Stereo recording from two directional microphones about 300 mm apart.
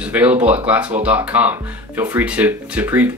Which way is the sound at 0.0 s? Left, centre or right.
Centre.